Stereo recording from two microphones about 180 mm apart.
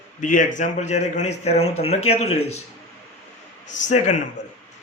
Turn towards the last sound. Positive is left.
turn(degrees=40)  # may be behind; listen again after turning